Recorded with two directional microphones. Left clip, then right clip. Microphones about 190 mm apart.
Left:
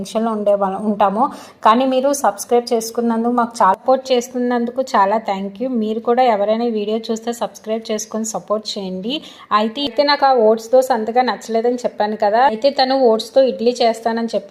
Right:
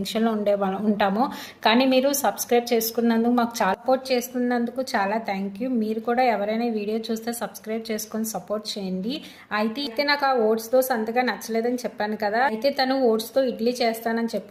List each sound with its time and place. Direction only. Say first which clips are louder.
0.1 s a woman's voice: left 7 dB; 5° right (ahead or behind)